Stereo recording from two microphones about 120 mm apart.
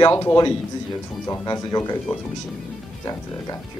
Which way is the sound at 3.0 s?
30° left (ahead or behind).